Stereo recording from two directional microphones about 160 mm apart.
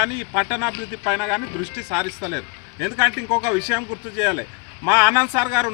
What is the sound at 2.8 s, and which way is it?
Speech, 15° right (ahead or behind).